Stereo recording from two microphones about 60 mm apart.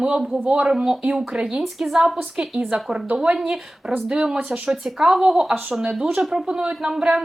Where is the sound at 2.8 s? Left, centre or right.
Centre.